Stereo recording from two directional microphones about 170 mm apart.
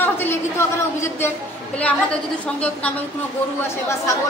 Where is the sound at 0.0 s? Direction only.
15° left (ahead or behind).